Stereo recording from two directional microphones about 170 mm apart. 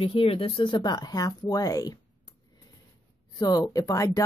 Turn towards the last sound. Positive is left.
turn(degrees=20)  # may be behind; listen again after turning